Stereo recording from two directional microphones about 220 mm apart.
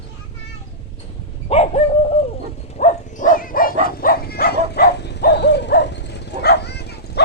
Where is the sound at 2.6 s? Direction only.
30° left (ahead or behind).